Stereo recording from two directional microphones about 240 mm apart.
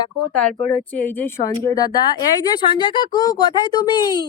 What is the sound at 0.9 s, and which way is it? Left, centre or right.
Speech, centre.